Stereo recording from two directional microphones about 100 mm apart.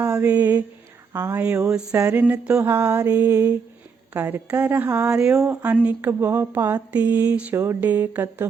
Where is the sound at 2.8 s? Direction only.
35° right (ahead or behind).